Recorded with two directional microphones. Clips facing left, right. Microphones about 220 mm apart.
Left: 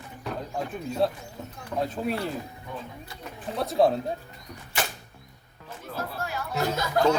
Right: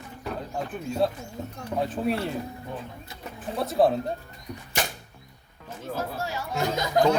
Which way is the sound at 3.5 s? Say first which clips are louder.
Even; centre (ahead or behind).